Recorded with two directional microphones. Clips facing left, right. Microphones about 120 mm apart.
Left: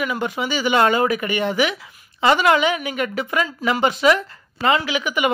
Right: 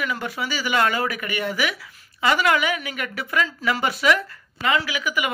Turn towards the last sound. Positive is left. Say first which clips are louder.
# left 5 dB
turn(degrees=25)  # may be behind; listen again after turning